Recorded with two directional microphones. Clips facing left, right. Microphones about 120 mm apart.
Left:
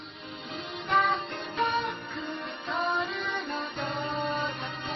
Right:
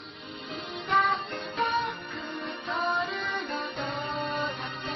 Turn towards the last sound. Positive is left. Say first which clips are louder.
# even
turn(degrees=0)  # may be behind; listen again after turning